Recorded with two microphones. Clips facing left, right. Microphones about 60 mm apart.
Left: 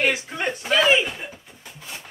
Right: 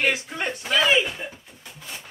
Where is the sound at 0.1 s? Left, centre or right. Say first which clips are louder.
Left 1 dB; centre.